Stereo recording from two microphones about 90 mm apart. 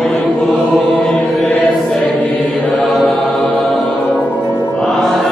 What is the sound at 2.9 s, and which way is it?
Choir, centre (ahead or behind).